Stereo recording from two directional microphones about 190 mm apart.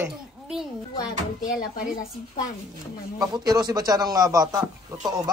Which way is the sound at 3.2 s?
20° right (ahead or behind).